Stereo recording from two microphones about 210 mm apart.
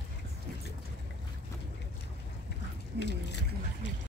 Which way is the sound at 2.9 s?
55° left (ahead or behind).